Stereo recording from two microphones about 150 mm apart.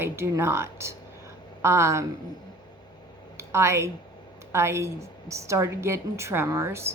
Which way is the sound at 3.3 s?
20° right (ahead or behind).